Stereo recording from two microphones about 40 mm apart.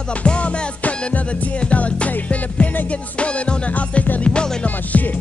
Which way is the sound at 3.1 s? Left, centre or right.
Left.